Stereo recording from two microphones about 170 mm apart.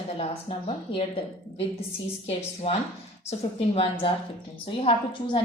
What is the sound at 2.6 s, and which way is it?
Speech, 35° left (ahead or behind).